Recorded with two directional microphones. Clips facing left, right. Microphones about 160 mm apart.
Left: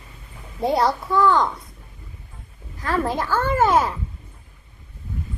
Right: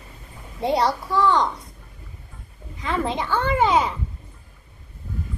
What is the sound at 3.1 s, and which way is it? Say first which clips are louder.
Child singing: left 1 dB; centre (ahead or behind).